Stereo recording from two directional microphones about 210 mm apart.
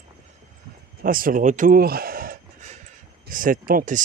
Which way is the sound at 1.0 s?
40° right (ahead or behind).